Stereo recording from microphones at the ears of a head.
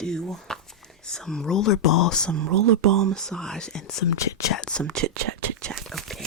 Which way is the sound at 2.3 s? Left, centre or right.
Right.